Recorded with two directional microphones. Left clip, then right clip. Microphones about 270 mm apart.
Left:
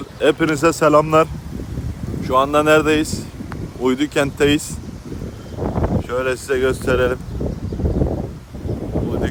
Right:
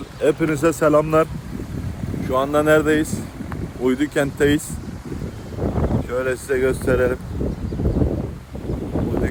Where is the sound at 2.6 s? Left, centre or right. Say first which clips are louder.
Even; centre.